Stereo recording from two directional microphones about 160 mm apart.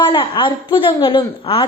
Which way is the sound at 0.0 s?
30° left (ahead or behind).